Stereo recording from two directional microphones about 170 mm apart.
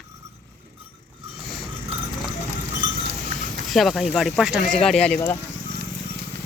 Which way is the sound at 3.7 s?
Centre (ahead or behind).